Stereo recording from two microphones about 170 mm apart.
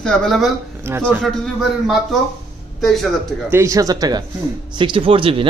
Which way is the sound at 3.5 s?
20° right (ahead or behind).